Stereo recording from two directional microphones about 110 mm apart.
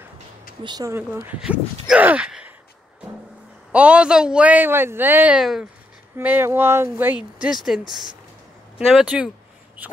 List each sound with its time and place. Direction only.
0.6 s speech: 45° right (ahead or behind)
0.9 s a man's voice: 20° right (ahead or behind)
3.7 s a man's voice: 10° right (ahead or behind)
5.4 s speech: 5° right (ahead or behind)
6.1 s a man's voice: 20° right (ahead or behind)
7.4 s a man's voice: 5° right (ahead or behind)